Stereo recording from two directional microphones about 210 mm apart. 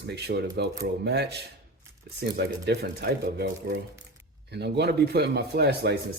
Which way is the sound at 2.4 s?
50° right (ahead or behind).